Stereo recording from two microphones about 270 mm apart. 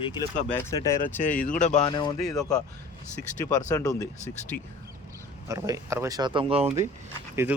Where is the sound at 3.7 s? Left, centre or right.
Centre.